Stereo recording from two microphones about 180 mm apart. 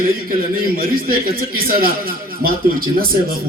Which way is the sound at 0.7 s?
55° right (ahead or behind).